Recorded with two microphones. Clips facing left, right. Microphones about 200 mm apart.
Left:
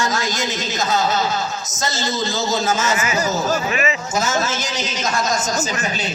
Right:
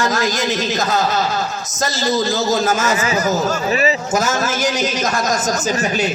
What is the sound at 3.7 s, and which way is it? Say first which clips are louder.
Speech: right 4 dB; 35° right (ahead or behind).